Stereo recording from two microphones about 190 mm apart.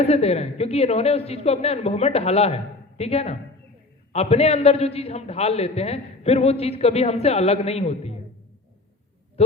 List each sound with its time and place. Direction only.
0.0 s a man's voice: 35° left (ahead or behind)